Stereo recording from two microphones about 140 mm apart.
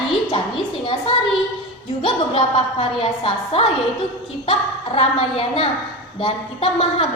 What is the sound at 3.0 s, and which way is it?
A woman's voice, 45° left (ahead or behind).